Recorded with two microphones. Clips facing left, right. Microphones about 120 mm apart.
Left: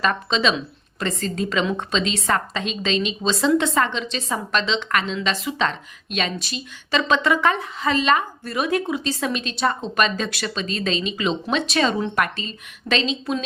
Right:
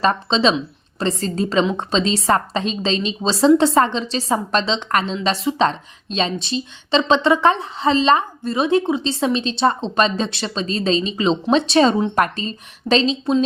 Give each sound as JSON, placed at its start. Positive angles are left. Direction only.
{"t": 0.0, "sound": "a woman's voice", "side_deg": -30}